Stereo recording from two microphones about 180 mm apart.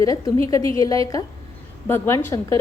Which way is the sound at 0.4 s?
20° left (ahead or behind).